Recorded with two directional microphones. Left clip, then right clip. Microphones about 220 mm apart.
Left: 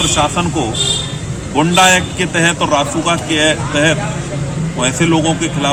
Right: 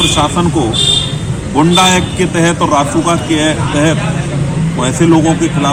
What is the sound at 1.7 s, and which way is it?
Speech, 15° left (ahead or behind).